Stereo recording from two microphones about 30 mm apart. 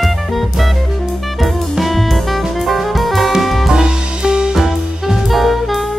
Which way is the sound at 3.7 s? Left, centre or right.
Right.